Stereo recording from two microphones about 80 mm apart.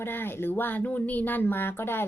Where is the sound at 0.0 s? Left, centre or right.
Left.